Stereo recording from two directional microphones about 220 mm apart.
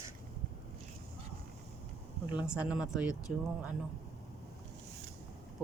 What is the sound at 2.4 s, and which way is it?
Speech, 5° right (ahead or behind).